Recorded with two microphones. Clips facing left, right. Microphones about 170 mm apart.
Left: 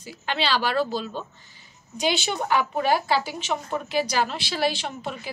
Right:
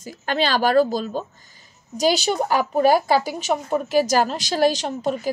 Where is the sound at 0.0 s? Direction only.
45° right (ahead or behind).